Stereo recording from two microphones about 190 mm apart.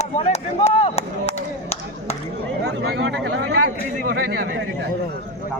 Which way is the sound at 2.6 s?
65° right (ahead or behind).